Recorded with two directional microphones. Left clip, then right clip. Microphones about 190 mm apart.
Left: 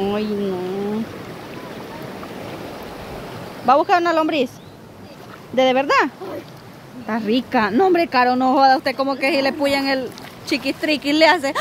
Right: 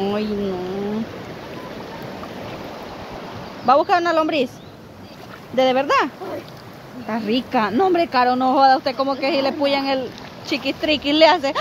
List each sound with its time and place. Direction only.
0.0 s speech: 15° left (ahead or behind)
3.6 s a woman's voice: 20° left (ahead or behind)
5.6 s a woman's voice: 20° left (ahead or behind)
7.1 s speech: 20° left (ahead or behind)